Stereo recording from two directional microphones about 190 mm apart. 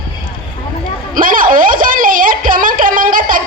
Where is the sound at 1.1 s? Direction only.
45° right (ahead or behind).